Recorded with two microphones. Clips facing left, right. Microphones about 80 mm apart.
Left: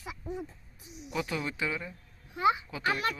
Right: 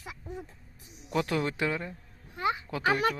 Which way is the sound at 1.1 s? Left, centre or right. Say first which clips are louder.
Right 5 dB; right.